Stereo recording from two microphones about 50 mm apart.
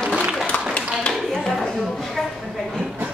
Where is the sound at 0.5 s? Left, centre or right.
Left.